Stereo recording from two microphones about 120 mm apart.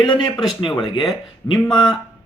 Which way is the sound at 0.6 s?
45° left (ahead or behind).